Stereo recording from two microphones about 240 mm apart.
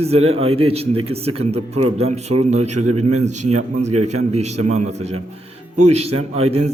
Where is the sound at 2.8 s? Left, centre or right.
Right.